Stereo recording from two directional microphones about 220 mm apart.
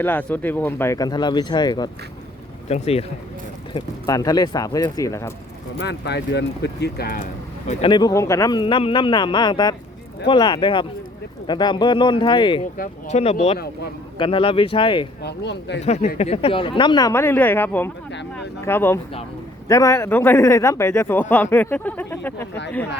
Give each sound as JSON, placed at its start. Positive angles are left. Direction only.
{"t": 0.0, "sound": "a man's voice", "side_deg": 10}
{"t": 5.8, "sound": "speech", "side_deg": 50}
{"t": 7.7, "sound": "speech", "side_deg": 25}
{"t": 12.7, "sound": "speech", "side_deg": 35}
{"t": 15.2, "sound": "speech", "side_deg": 50}
{"t": 15.8, "sound": "a man's voice", "side_deg": 30}